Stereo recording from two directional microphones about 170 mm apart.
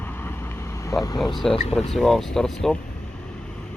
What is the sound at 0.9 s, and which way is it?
Speech, 20° left (ahead or behind).